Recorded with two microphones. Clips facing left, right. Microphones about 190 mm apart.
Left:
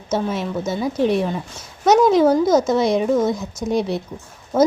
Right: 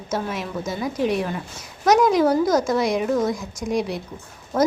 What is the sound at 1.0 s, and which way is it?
Speech, 30° left (ahead or behind).